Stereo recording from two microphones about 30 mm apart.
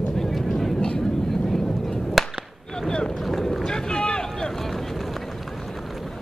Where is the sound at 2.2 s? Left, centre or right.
Centre.